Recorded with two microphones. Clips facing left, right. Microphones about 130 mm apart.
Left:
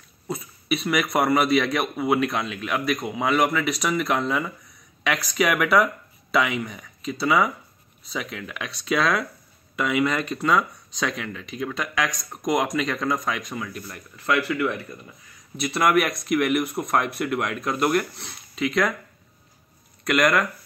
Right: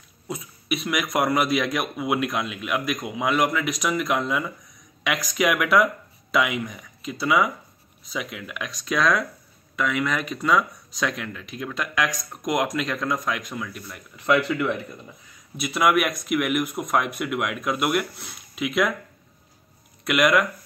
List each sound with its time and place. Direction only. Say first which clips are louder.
0.3 s a man's voice: left 2 dB; centre (ahead or behind)
14.1 s speech: right 2 dB; 20° right (ahead or behind)
15.6 s speech: even; centre (ahead or behind)
20.1 s speech: right 1 dB; 5° right (ahead or behind)